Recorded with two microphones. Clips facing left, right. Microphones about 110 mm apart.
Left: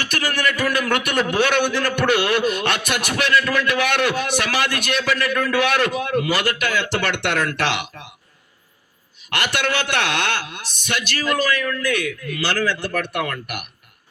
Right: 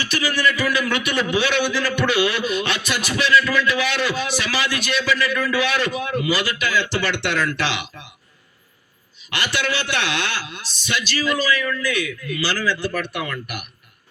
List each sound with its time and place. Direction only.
0.0 s a man's voice: 55° left (ahead or behind)
9.3 s a man's voice: 55° left (ahead or behind)